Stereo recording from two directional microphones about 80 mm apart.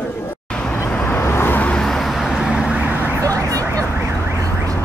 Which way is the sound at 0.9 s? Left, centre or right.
Left.